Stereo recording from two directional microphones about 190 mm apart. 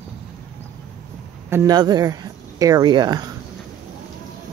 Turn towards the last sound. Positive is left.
turn(degrees=-20)  # may be behind; listen again after turning